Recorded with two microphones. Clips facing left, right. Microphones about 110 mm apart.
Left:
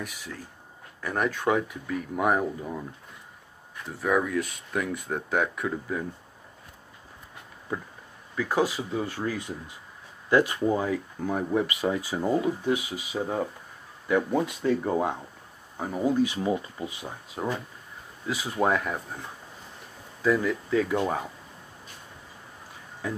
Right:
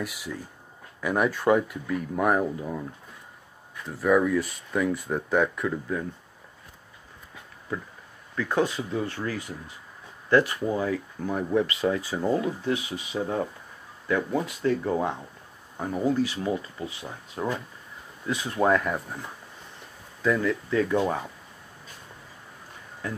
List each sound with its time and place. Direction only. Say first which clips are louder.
0.0 s speech: right 4 dB; 5° right (ahead or behind)
3.9 s speech: right 4 dB; centre (ahead or behind)
8.4 s speech: even; 10° left (ahead or behind)
17.4 s speech: right 1 dB; 10° left (ahead or behind)